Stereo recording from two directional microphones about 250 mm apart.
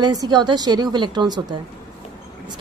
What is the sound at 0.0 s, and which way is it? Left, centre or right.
Speech, centre.